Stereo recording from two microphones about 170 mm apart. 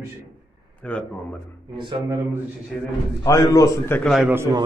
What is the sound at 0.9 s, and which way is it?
Speech, 10° left (ahead or behind).